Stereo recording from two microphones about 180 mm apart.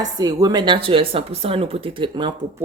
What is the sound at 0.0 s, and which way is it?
Speech, 20° right (ahead or behind).